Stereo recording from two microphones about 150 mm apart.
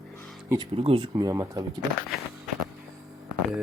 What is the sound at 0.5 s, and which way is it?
Speech, 35° right (ahead or behind).